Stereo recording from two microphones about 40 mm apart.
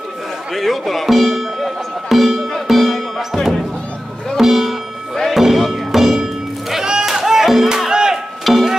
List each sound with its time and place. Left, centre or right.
0.5 s speech: centre
4.4 s speech: centre
5.3 s music: centre
8.5 s music: centre